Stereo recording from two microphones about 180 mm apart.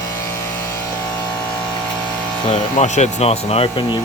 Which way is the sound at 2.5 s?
40° left (ahead or behind).